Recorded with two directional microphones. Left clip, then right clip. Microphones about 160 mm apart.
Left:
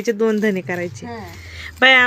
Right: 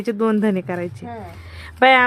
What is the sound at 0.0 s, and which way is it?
A woman's voice, 20° right (ahead or behind).